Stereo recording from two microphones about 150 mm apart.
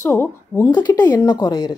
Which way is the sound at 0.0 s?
15° left (ahead or behind).